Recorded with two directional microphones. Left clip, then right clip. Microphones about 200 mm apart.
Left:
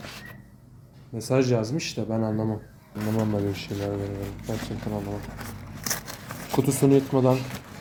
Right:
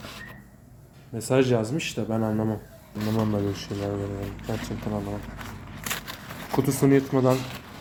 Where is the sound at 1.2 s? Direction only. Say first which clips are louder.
Right 1 dB; centre (ahead or behind).